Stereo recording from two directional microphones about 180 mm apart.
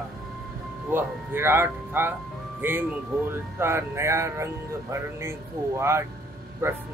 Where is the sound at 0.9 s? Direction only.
10° right (ahead or behind).